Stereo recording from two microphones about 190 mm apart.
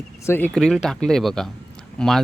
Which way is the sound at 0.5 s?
Centre (ahead or behind).